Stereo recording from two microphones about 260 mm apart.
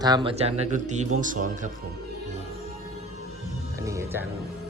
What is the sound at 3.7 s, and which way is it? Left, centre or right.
Speech, centre.